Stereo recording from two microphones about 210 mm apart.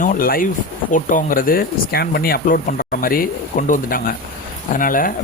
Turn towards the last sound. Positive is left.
turn(degrees=40)  # may be behind; listen again after turning